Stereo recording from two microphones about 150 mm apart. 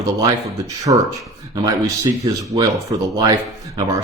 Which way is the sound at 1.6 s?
20° right (ahead or behind).